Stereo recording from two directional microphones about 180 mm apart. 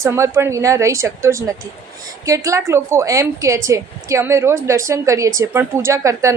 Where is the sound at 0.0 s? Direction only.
15° right (ahead or behind).